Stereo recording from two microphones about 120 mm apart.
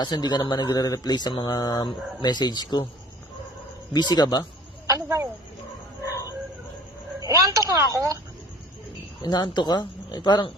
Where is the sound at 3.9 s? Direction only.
35° left (ahead or behind).